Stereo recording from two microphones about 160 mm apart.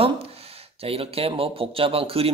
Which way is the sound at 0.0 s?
35° right (ahead or behind).